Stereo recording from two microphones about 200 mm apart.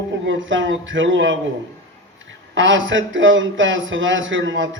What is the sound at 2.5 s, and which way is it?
A man's voice, 70° right (ahead or behind).